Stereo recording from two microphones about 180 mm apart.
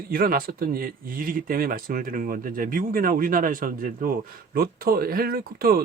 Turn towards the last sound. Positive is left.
turn(degrees=-55)  # may be behind; listen again after turning